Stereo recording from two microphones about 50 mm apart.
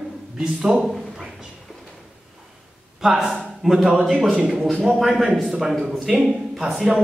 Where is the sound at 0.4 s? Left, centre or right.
Centre.